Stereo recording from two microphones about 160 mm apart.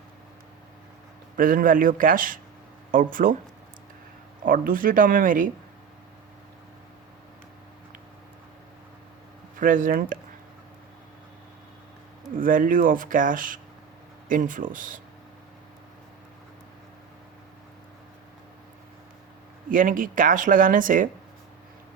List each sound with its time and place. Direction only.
1.4 s speech: 60° right (ahead or behind)
4.4 s speech: 60° right (ahead or behind)
9.6 s speech: 55° right (ahead or behind)
12.4 s speech: 60° right (ahead or behind)
19.7 s speech: 55° right (ahead or behind)